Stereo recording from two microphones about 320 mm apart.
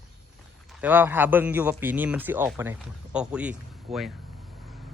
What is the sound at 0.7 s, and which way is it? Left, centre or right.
Speech, centre.